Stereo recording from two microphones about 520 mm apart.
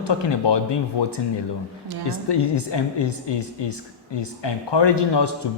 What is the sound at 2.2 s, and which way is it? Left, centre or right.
A woman's voice, left.